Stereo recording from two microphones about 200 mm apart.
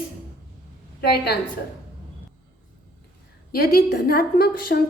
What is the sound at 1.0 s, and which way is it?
Speech, 55° left (ahead or behind).